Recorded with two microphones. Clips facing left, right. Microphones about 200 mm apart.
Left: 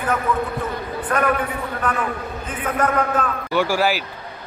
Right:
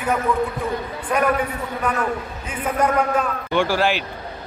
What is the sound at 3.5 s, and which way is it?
Speech, 10° left (ahead or behind).